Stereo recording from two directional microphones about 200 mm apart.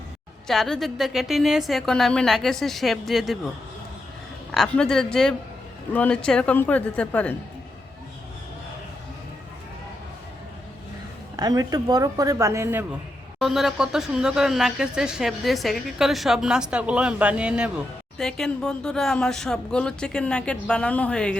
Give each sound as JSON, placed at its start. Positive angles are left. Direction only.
{"t": 0.4, "sound": "a woman's voice", "side_deg": 0}
{"t": 4.5, "sound": "a woman's voice", "side_deg": 0}
{"t": 11.3, "sound": "a woman's voice", "side_deg": -20}